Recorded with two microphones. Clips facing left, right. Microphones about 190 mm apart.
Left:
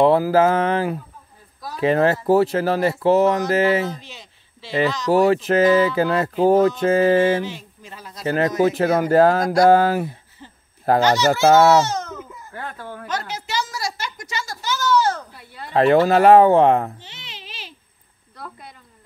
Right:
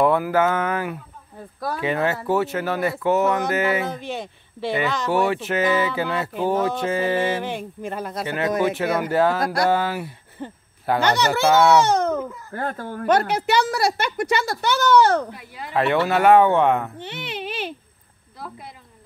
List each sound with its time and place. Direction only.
0.0 s speech: 30° left (ahead or behind)
3.9 s speech: 55° right (ahead or behind)
5.1 s speech: 40° left (ahead or behind)
7.4 s a child's voice: 55° right (ahead or behind)
8.7 s speech: 40° left (ahead or behind)
10.4 s a child's voice: 55° right (ahead or behind)
15.3 s speech: 10° right (ahead or behind)
15.7 s speech: 35° left (ahead or behind)
17.0 s a child's voice: 60° right (ahead or behind)